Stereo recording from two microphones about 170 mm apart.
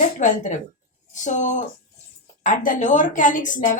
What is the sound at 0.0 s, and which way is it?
Speech, 50° left (ahead or behind).